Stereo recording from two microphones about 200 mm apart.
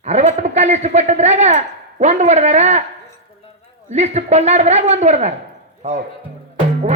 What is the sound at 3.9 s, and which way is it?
A man's voice, 35° right (ahead or behind).